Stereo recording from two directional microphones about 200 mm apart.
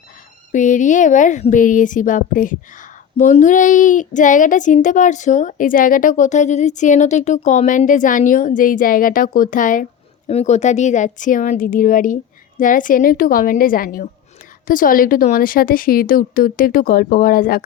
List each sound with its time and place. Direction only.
0.5 s a woman's voice: 40° left (ahead or behind)